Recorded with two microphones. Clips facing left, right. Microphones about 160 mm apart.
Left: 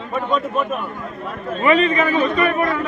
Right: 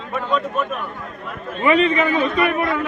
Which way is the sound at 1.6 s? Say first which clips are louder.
Even; 15° right (ahead or behind).